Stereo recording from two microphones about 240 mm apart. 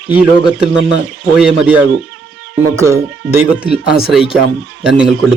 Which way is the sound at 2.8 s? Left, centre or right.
Centre.